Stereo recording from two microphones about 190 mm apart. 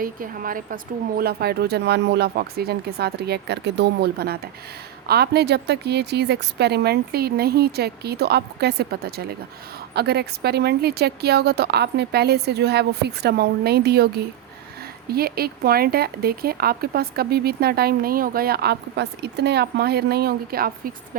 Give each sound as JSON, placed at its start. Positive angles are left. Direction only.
{"t": 0.0, "sound": "speech", "side_deg": -50}